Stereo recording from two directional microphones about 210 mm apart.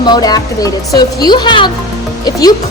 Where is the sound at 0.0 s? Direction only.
20° left (ahead or behind).